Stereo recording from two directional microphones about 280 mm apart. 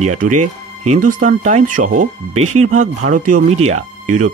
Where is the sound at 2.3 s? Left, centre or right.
Right.